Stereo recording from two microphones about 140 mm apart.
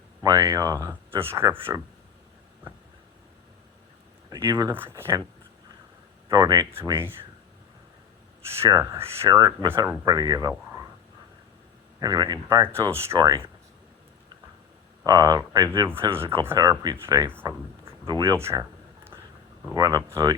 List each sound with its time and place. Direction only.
0.2 s speech: 25° right (ahead or behind)
4.3 s speech: 25° right (ahead or behind)
4.7 s speech: 15° right (ahead or behind)
6.2 s speech: 30° right (ahead or behind)
8.6 s speech: 20° right (ahead or behind)
11.9 s speech: 25° right (ahead or behind)
13.1 s speech: 30° right (ahead or behind)
15.0 s speech: 25° right (ahead or behind)
15.9 s speech: 15° right (ahead or behind)
16.6 s speech: 30° right (ahead or behind)
19.7 s speech: 25° right (ahead or behind)